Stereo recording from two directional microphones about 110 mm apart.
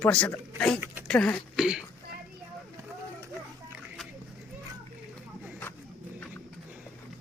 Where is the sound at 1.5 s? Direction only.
5° right (ahead or behind).